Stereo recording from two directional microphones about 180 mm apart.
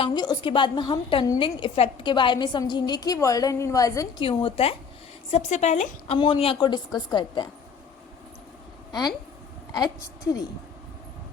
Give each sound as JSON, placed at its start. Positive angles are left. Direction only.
{"t": 0.0, "sound": "a woman's voice", "side_deg": 25}
{"t": 4.3, "sound": "a woman's voice", "side_deg": 30}